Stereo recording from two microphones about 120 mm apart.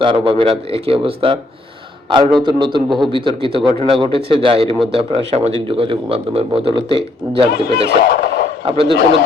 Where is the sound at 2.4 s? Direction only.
40° right (ahead or behind).